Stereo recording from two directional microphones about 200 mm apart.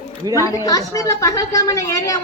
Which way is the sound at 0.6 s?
20° left (ahead or behind).